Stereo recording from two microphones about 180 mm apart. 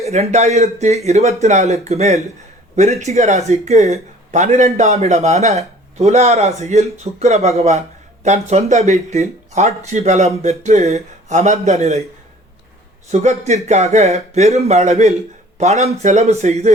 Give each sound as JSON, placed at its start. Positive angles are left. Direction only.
{"t": 0.0, "sound": "speech", "side_deg": -35}
{"t": 13.1, "sound": "speech", "side_deg": -40}